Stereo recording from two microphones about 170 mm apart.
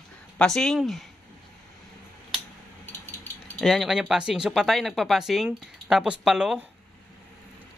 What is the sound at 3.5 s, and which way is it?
Speech, centre (ahead or behind).